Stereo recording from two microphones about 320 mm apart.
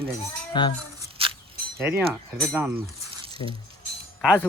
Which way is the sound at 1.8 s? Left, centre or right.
Centre.